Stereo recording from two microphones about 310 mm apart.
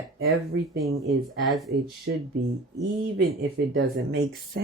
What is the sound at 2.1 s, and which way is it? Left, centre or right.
Speech, right.